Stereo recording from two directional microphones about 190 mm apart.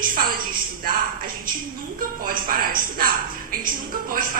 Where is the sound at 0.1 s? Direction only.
50° right (ahead or behind).